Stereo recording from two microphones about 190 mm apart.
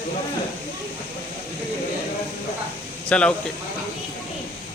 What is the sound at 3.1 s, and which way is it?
Speech, 5° left (ahead or behind).